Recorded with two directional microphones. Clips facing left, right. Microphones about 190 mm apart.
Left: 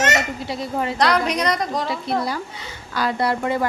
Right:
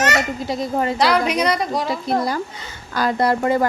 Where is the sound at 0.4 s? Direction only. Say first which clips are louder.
Right 3 dB; 45° right (ahead or behind).